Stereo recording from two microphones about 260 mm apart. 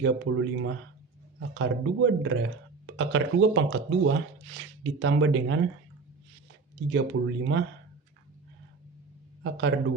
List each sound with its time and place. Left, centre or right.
0.0 s speech: right
6.9 s speech: right
9.4 s a man's voice: right